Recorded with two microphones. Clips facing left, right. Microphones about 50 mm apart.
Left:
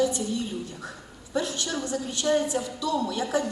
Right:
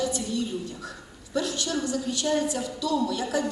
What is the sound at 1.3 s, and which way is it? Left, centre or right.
A woman's voice, left.